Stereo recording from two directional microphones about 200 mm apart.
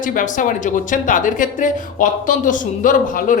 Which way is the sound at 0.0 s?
40° left (ahead or behind).